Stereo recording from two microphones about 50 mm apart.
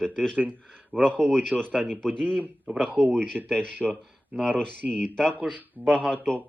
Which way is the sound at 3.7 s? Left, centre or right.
Right.